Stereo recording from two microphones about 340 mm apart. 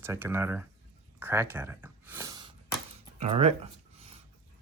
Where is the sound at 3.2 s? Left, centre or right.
Centre.